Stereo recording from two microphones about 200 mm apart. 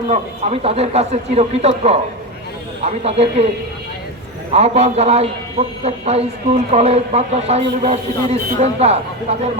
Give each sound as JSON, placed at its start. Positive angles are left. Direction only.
{"t": 0.1, "sound": "a man's voice", "side_deg": -30}
{"t": 4.5, "sound": "a man's voice", "side_deg": -30}